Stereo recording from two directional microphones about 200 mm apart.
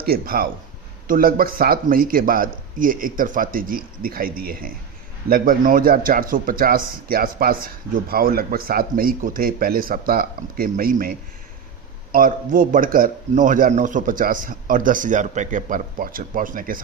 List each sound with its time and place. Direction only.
0.0 s a man's voice: 50° right (ahead or behind)